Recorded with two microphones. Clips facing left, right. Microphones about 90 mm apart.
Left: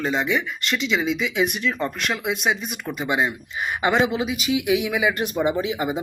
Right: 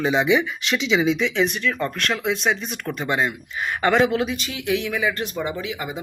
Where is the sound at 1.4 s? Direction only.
15° left (ahead or behind).